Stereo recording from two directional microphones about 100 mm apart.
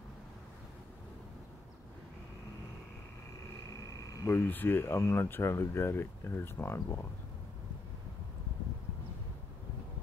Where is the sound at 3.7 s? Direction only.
35° left (ahead or behind).